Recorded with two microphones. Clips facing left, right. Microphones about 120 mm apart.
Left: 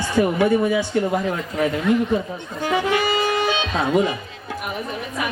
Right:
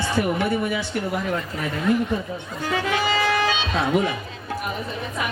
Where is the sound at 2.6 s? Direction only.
15° left (ahead or behind).